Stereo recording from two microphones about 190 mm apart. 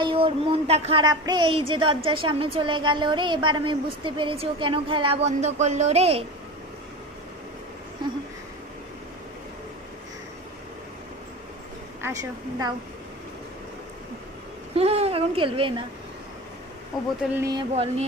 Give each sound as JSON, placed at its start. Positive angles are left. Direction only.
{"t": 0.0, "sound": "a woman's voice", "side_deg": -30}
{"t": 12.0, "sound": "a woman's voice", "side_deg": -20}
{"t": 14.8, "sound": "speech", "side_deg": -30}
{"t": 17.3, "sound": "a woman's voice", "side_deg": -20}